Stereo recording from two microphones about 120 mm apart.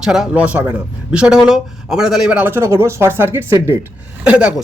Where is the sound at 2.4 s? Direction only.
20° right (ahead or behind).